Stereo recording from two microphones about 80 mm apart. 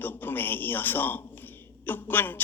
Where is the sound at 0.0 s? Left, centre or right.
Left.